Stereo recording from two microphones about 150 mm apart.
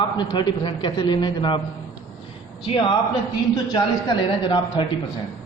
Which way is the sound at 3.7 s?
30° left (ahead or behind).